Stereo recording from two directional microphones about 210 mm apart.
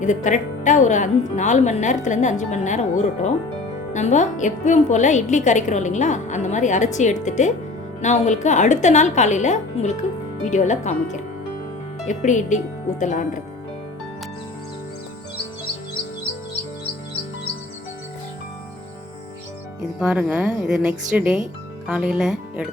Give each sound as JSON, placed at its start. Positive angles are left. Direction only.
{"t": 0.0, "sound": "a woman's voice", "side_deg": 35}
{"t": 20.0, "sound": "speech", "side_deg": -5}